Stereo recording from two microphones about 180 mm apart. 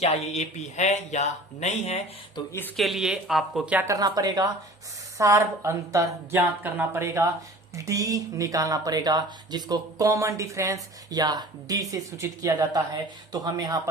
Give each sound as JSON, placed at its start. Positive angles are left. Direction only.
{"t": 0.0, "sound": "speech", "side_deg": 40}
{"t": 2.3, "sound": "speech", "side_deg": 15}
{"t": 2.7, "sound": "speech", "side_deg": 0}